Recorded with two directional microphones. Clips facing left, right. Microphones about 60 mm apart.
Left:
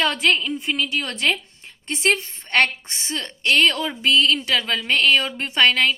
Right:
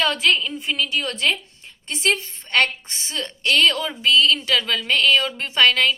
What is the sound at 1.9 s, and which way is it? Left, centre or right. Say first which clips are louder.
A woman's voice: left 1 dB; left.